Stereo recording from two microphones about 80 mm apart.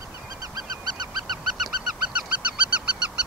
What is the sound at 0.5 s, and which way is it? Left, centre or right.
Goose, right.